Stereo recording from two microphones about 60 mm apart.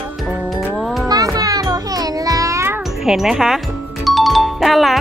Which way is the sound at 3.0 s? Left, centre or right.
Centre.